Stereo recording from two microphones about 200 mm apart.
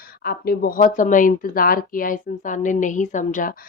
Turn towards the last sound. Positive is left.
turn(degrees=40)  # may be behind; listen again after turning